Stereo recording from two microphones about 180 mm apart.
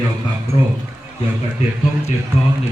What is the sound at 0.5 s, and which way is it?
Speech, 30° left (ahead or behind).